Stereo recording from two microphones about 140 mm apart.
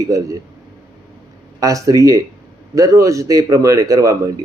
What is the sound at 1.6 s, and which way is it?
Speech, 25° right (ahead or behind).